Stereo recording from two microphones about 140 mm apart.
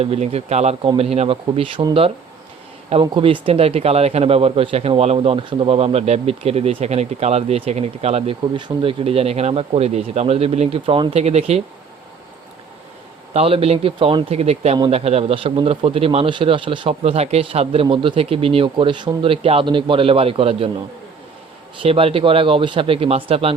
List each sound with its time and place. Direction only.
0.0 s speech: 45° right (ahead or behind)
8.5 s speech: 35° right (ahead or behind)
11.2 s speech: 50° right (ahead or behind)
13.3 s a man's voice: 45° right (ahead or behind)